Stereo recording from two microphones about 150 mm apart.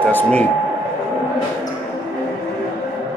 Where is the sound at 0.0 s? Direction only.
10° left (ahead or behind).